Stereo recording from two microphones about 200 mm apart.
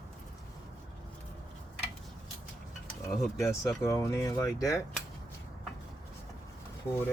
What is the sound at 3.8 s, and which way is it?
Speech, 15° left (ahead or behind).